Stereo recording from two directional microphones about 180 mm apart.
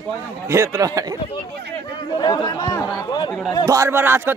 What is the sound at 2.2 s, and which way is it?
Speech, 25° left (ahead or behind).